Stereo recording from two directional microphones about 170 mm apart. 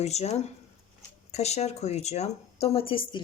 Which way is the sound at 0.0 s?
40° left (ahead or behind).